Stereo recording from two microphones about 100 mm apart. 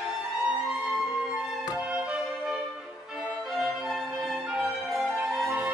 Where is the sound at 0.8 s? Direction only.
Centre (ahead or behind).